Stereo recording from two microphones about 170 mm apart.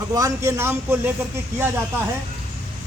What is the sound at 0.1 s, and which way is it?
A man's voice, 20° right (ahead or behind).